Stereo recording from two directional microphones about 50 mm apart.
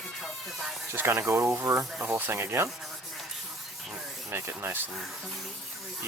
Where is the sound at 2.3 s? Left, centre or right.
Right.